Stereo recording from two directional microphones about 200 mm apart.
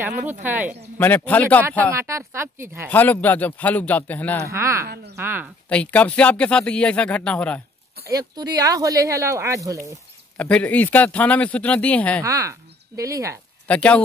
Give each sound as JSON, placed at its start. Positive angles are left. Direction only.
{"t": 0.3, "sound": "speech", "side_deg": -10}
{"t": 0.9, "sound": "speech", "side_deg": 10}
{"t": 1.9, "sound": "speech", "side_deg": -15}
{"t": 2.9, "sound": "speech", "side_deg": 10}
{"t": 4.5, "sound": "speech", "side_deg": -15}
{"t": 4.8, "sound": "speech", "side_deg": -50}
{"t": 5.1, "sound": "speech", "side_deg": -10}
{"t": 5.7, "sound": "speech", "side_deg": 5}
{"t": 8.1, "sound": "speech", "side_deg": -20}
{"t": 10.3, "sound": "speech", "side_deg": 5}
{"t": 12.2, "sound": "speech", "side_deg": -15}
{"t": 13.7, "sound": "speech", "side_deg": 5}